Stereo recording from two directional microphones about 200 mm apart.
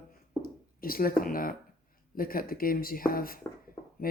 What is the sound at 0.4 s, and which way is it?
Speech, 45° left (ahead or behind).